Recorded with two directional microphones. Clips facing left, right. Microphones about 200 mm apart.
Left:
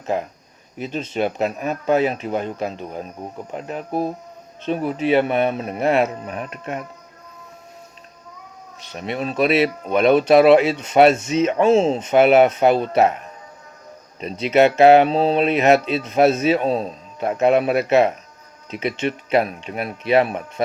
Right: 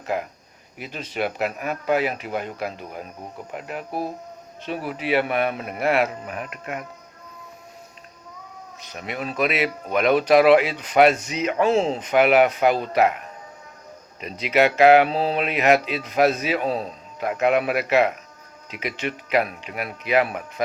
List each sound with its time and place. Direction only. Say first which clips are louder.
0.0 s speech: left 3 dB; 25° left (ahead or behind)
8.9 s speech: left 5 dB; 30° left (ahead or behind)
14.2 s speech: left 4 dB; 30° left (ahead or behind)